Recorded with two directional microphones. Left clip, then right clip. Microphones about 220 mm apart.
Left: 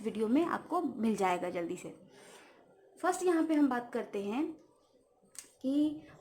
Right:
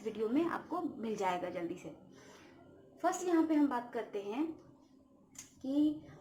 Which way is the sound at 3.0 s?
45° left (ahead or behind).